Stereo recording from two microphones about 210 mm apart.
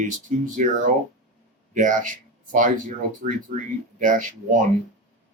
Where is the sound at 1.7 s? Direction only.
40° right (ahead or behind).